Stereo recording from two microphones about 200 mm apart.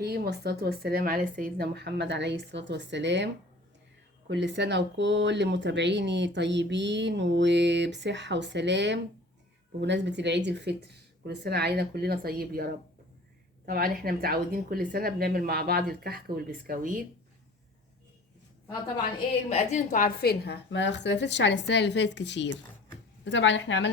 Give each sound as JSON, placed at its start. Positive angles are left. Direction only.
{"t": 0.0, "sound": "speech", "side_deg": -55}
{"t": 4.3, "sound": "speech", "side_deg": -60}
{"t": 19.5, "sound": "a woman's voice", "side_deg": 35}